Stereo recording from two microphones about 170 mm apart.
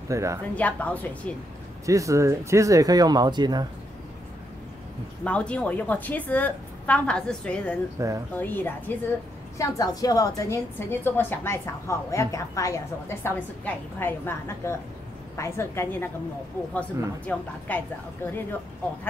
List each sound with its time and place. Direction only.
0.1 s a woman's voice: 20° right (ahead or behind)
0.6 s a woman's voice: 10° left (ahead or behind)
1.9 s speech: 20° right (ahead or behind)
5.2 s a woman's voice: 5° left (ahead or behind)
8.0 s a woman's voice: 15° right (ahead or behind)
8.4 s a woman's voice: 10° left (ahead or behind)
17.3 s a woman's voice: 10° left (ahead or behind)